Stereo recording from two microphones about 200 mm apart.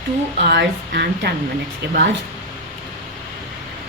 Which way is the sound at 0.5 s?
55° right (ahead or behind).